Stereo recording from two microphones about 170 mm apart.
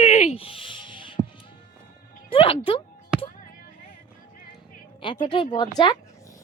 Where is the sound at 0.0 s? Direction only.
45° left (ahead or behind); by 1.2 s 30° left (ahead or behind).